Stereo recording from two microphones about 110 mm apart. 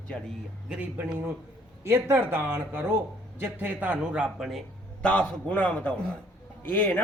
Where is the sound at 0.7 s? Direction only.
15° right (ahead or behind).